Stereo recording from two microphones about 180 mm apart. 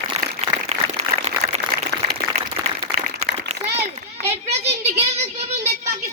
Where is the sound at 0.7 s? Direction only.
35° right (ahead or behind).